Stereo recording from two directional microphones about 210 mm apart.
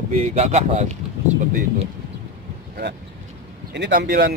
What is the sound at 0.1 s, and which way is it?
Speech, 30° right (ahead or behind).